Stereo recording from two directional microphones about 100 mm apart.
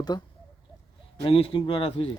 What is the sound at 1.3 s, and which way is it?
Speech, 70° left (ahead or behind).